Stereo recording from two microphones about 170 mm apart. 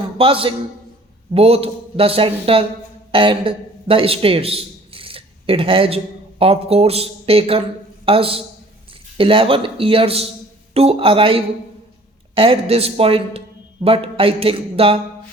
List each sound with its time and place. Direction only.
0.2 s a man's voice: 30° right (ahead or behind)